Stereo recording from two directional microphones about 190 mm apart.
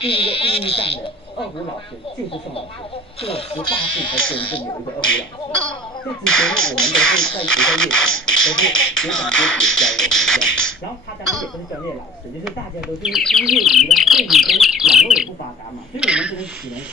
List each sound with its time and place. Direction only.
0.0 s speech: 30° left (ahead or behind)
3.2 s speech: 30° left (ahead or behind)
6.2 s speech: 5° left (ahead or behind)
12.4 s speech: centre (ahead or behind)